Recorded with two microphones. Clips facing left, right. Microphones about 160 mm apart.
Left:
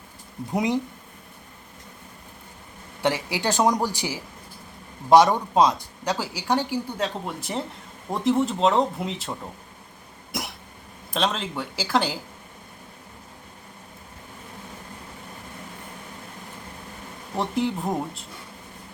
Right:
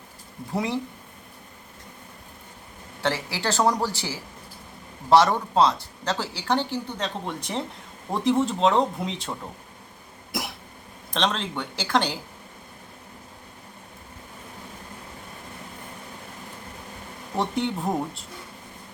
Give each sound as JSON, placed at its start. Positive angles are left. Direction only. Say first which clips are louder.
{"t": 0.5, "sound": "speech", "louder": "left 3 dB", "side_deg": 15}
{"t": 3.0, "sound": "speech", "louder": "left 2 dB", "side_deg": 15}
{"t": 11.1, "sound": "speech", "louder": "even", "side_deg": 5}
{"t": 17.3, "sound": "speech", "louder": "left 1 dB", "side_deg": 0}